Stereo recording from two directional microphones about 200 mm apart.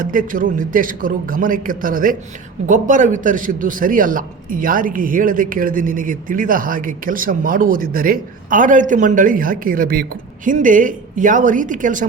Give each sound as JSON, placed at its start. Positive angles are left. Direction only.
{"t": 0.0, "sound": "a man's voice", "side_deg": -45}